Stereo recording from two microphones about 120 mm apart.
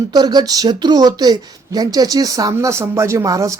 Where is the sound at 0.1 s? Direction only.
35° right (ahead or behind).